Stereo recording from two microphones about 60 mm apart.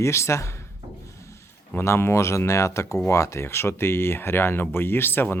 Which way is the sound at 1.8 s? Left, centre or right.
Left.